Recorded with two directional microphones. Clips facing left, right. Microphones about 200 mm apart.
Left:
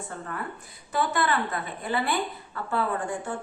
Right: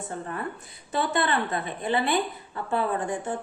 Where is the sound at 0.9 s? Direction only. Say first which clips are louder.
Even; 25° right (ahead or behind).